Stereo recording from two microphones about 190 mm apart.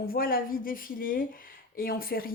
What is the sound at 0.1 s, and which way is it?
Speech, 50° left (ahead or behind).